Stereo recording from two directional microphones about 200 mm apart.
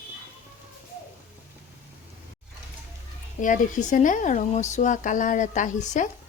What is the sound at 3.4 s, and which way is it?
Speech, 40° left (ahead or behind).